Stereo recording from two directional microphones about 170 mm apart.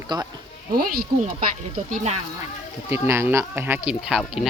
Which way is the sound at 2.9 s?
15° right (ahead or behind).